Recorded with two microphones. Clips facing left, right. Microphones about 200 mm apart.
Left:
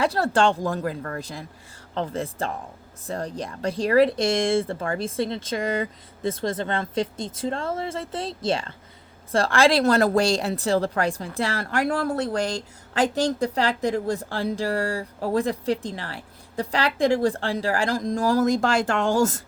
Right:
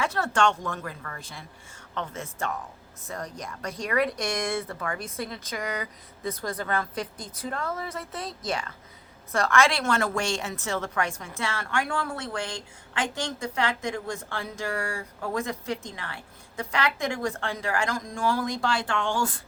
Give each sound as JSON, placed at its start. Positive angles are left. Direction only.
{"t": 0.0, "sound": "a woman's voice", "side_deg": 35}